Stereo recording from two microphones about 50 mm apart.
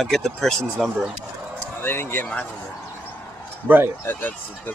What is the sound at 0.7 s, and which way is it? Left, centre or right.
Speech, centre.